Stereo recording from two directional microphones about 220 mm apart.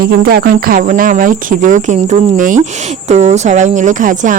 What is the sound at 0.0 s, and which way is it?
Speech, 45° right (ahead or behind).